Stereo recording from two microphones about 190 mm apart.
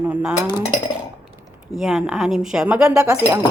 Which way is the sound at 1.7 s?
Centre (ahead or behind).